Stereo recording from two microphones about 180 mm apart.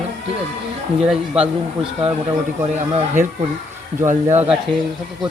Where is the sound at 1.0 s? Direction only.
5° right (ahead or behind).